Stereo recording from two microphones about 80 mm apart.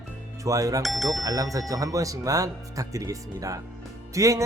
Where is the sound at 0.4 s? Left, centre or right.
Right.